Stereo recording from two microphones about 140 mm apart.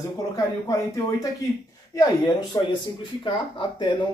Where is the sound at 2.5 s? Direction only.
25° left (ahead or behind).